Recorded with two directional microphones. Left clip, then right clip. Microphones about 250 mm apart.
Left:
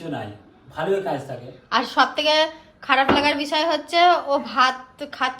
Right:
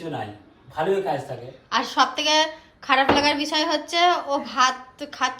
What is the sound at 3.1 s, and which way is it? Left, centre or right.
Speech, right.